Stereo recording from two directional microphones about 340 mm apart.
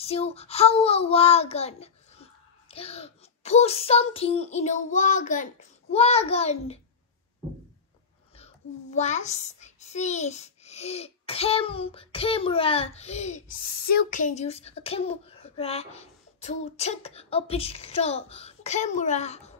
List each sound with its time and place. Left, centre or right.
0.0 s a child's voice: centre
8.9 s a child's voice: centre